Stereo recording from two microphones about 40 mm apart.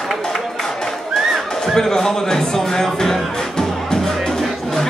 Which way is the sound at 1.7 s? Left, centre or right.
Centre.